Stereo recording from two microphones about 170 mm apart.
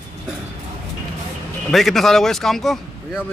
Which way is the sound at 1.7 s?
Centre (ahead or behind).